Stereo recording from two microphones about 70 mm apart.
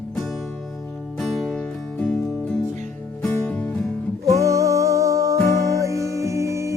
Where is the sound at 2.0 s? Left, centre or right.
Centre.